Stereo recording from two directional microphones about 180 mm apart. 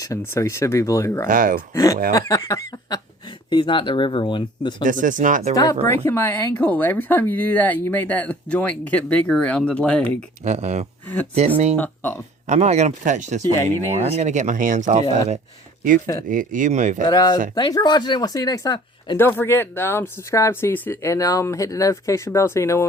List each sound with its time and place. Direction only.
0.0 s speech: 15° left (ahead or behind)
1.3 s speech: 50° right (ahead or behind)
1.7 s speech: 20° left (ahead or behind)
4.8 s speech: 45° right (ahead or behind)
5.9 s speech: 15° left (ahead or behind)
10.4 s speech: 40° right (ahead or behind)
11.8 s speech: 10° left (ahead or behind)
12.5 s speech: 40° right (ahead or behind)
16.3 s speech: 45° right (ahead or behind)
17.1 s speech: 20° left (ahead or behind)